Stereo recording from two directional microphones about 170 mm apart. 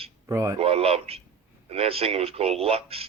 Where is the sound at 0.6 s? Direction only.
35° right (ahead or behind).